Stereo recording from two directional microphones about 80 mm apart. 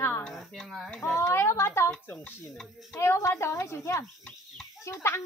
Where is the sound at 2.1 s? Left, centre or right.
Left.